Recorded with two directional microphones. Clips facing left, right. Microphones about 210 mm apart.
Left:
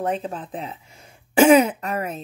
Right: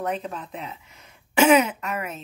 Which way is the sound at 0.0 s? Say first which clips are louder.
Left 3 dB; 30° left (ahead or behind).